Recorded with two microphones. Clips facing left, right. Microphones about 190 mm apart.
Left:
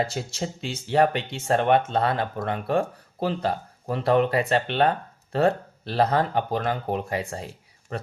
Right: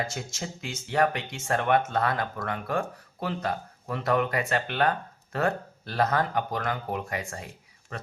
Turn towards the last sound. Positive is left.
turn(degrees=30)  # may be behind; listen again after turning